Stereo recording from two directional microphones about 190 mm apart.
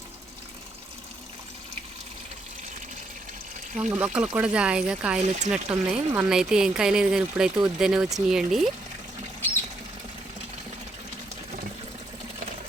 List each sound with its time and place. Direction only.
3.8 s speech: 10° right (ahead or behind)
5.2 s speech: 40° right (ahead or behind)
5.5 s speech: 5° right (ahead or behind)